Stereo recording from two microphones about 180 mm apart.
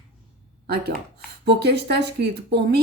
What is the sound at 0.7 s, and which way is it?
Speech, 60° right (ahead or behind).